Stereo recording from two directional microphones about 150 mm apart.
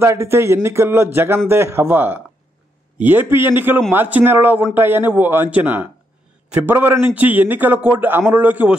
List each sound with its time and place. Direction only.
0.0 s a man's voice: 20° right (ahead or behind)